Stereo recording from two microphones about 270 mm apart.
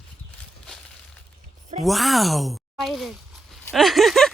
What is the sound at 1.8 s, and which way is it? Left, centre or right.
Speech, centre.